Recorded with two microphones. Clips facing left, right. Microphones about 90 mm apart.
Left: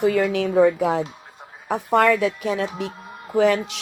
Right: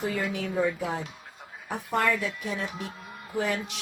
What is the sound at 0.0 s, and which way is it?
Speech, 80° left.